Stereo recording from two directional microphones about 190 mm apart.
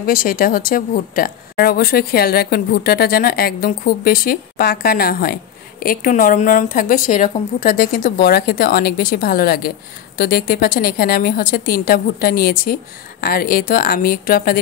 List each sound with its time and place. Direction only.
0.0 s speech: 50° left (ahead or behind)